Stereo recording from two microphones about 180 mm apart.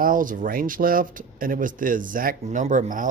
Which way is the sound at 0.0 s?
50° right (ahead or behind).